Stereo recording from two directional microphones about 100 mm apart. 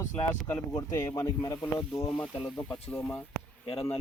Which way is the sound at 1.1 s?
35° left (ahead or behind).